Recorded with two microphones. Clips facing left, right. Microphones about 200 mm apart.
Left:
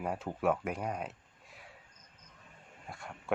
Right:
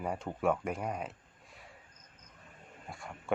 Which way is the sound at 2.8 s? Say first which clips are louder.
Even; centre (ahead or behind).